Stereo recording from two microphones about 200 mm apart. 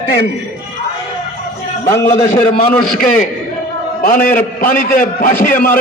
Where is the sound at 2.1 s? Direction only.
30° left (ahead or behind).